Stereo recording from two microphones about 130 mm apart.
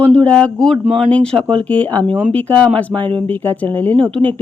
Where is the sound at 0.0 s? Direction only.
10° left (ahead or behind).